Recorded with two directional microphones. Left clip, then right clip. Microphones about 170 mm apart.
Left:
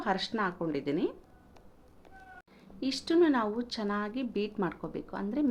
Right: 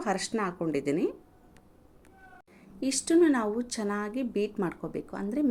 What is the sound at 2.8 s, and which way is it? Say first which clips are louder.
Speech: right 3 dB; 20° right (ahead or behind).